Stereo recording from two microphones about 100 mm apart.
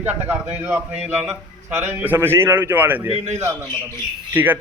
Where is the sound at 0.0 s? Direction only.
20° right (ahead or behind).